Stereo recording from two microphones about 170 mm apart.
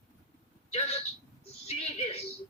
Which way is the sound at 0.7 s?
40° left (ahead or behind).